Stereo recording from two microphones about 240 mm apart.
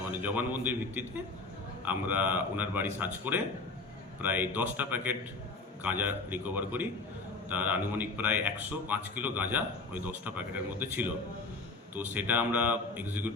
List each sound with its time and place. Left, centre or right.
0.0 s speech: centre
12.1 s speech: centre